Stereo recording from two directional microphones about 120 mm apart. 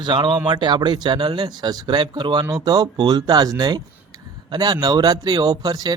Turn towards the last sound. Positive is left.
turn(degrees=-35)  # may be behind; listen again after turning